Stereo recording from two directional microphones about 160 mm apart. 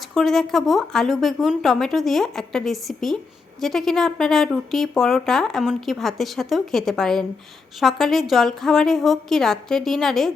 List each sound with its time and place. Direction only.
0.1 s speech: centre (ahead or behind)